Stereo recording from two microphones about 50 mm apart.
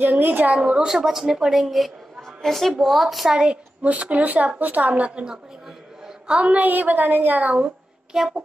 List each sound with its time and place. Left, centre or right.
0.2 s a woman's voice: right
0.5 s speech: right
0.8 s a woman's voice: centre
3.3 s a woman's voice: centre
3.8 s a woman's voice: right
8.1 s speech: centre